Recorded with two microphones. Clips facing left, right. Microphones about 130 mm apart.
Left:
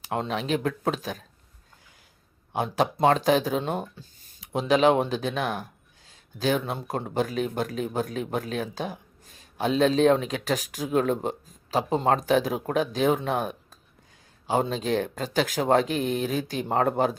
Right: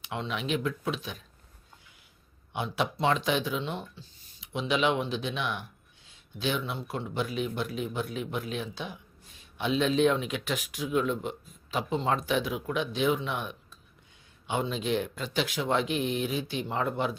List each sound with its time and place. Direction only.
0.0 s speech: 40° left (ahead or behind)
2.5 s speech: 40° left (ahead or behind)